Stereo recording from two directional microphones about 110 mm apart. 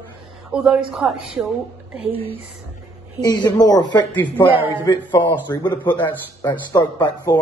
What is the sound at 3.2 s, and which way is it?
Speech, 35° left (ahead or behind).